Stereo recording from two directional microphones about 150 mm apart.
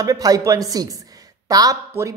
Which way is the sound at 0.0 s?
25° right (ahead or behind).